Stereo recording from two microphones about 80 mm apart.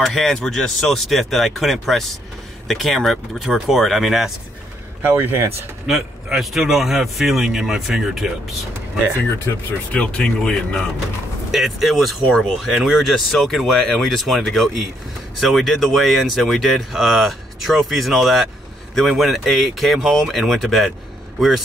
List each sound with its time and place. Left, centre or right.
0.0 s speech: centre
5.0 s speech: right
5.9 s speech: centre
9.9 s speech: centre
11.5 s speech: centre
12.8 s speech: centre
13.1 s speech: centre